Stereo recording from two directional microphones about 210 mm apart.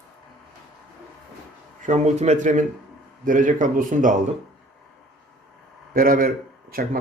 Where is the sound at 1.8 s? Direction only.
35° right (ahead or behind).